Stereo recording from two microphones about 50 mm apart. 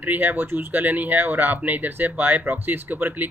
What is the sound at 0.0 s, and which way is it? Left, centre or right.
Speech, right.